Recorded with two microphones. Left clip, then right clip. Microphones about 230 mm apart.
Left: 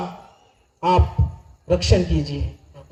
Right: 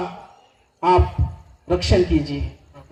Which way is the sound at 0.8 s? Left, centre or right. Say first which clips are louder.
Right 2 dB; right.